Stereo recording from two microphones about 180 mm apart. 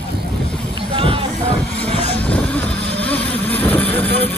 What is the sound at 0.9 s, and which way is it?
Music, 30° right (ahead or behind).